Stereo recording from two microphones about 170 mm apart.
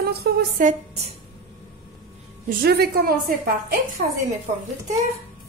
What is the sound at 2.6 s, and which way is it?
Speech, 65° right (ahead or behind).